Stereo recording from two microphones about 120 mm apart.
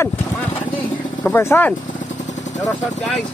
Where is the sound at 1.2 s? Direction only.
20° left (ahead or behind).